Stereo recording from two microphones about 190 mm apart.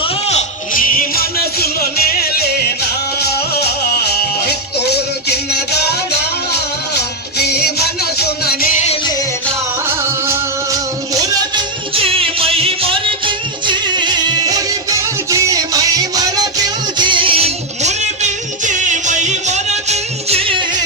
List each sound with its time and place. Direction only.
0.0 s music: 35° left (ahead or behind); by 1.7 s 55° left (ahead or behind)
3.2 s music: 55° left (ahead or behind)
4.9 s music: 60° left (ahead or behind)
10.2 s music: 20° right (ahead or behind)
11.9 s music: 30° right (ahead or behind)